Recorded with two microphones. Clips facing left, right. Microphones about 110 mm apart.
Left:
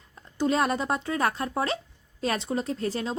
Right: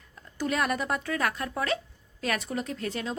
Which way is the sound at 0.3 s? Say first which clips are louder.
Left 4 dB; 30° left (ahead or behind).